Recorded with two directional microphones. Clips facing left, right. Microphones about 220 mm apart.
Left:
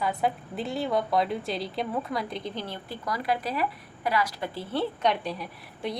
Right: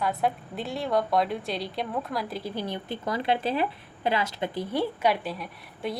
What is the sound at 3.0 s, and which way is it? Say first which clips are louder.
A woman's voice: right 2 dB; 25° right (ahead or behind).